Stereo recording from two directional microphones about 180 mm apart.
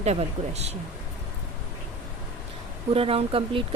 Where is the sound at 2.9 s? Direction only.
30° right (ahead or behind).